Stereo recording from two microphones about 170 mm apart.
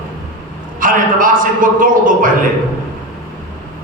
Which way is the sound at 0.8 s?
55° right (ahead or behind).